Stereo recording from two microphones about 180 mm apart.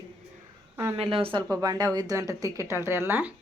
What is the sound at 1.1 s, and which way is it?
Speech, 30° right (ahead or behind).